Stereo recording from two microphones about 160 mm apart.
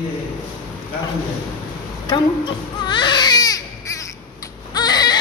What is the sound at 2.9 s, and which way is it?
Baby cry, 30° left (ahead or behind).